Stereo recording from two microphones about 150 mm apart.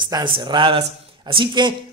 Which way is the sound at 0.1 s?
30° right (ahead or behind).